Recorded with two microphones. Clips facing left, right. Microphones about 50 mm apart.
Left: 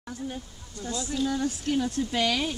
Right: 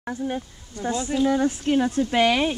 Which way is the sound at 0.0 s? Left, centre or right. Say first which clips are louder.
Right 8 dB; right.